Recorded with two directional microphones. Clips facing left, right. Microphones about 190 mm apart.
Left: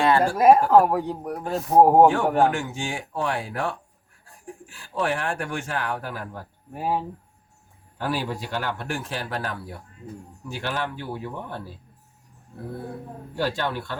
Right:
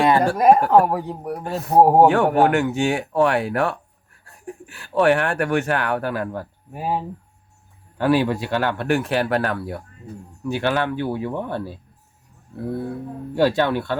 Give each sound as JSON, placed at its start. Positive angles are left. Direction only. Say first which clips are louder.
{"t": 0.0, "sound": "a sound", "louder": "right 3 dB", "side_deg": -20}
{"t": 0.3, "sound": "a man's voice", "louder": "left 1 dB", "side_deg": 0}
{"t": 2.0, "sound": "speech", "louder": "right 3 dB", "side_deg": -65}
{"t": 6.7, "sound": "a man's voice", "louder": "right 1 dB", "side_deg": -5}
{"t": 7.9, "sound": "speech", "louder": "right 9 dB", "side_deg": -65}
{"t": 13.6, "sound": "speech", "louder": "right 8 dB", "side_deg": -65}